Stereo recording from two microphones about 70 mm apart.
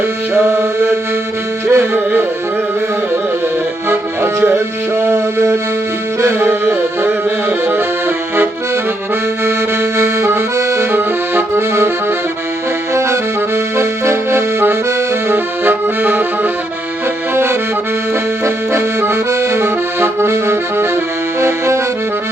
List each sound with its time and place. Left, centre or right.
0.3 s music: right
3.8 s music: right
10.0 s accordion: right
12.9 s accordion: right